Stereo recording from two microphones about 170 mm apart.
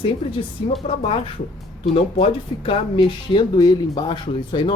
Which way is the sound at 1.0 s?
35° left (ahead or behind).